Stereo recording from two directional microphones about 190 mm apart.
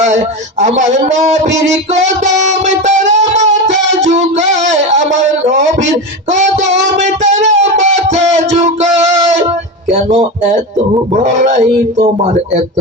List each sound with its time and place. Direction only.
0.0 s speech: 40° right (ahead or behind)
3.9 s music: 40° right (ahead or behind)
5.5 s a man's voice: 40° right (ahead or behind)
6.8 s music: 40° right (ahead or behind)
11.1 s a man's voice: 40° right (ahead or behind)